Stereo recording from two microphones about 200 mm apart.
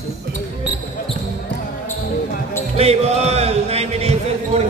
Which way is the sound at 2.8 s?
30° right (ahead or behind).